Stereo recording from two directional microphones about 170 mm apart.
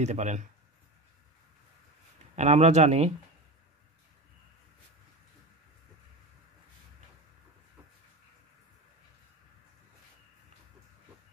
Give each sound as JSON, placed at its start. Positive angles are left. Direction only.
{"t": 0.0, "sound": "speech", "side_deg": -45}
{"t": 2.3, "sound": "speech", "side_deg": -40}